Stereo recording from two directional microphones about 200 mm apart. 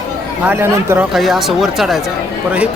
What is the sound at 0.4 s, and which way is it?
Speech, 10° right (ahead or behind).